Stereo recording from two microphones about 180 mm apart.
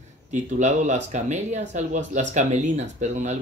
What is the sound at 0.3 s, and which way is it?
A man's voice, 40° right (ahead or behind).